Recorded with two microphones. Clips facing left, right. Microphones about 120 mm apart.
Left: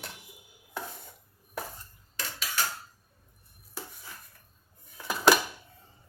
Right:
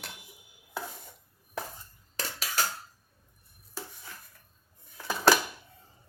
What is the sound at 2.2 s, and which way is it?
Cutlery, 40° right (ahead or behind).